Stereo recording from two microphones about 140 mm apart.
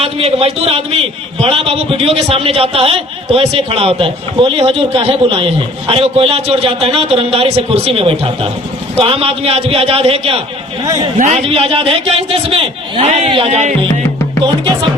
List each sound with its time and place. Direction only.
0.0 s a man's voice: 45° right (ahead or behind)
10.8 s a man's voice: 25° right (ahead or behind)
11.4 s a man's voice: 45° right (ahead or behind)